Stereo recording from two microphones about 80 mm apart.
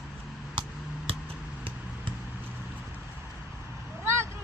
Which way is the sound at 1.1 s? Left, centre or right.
Right.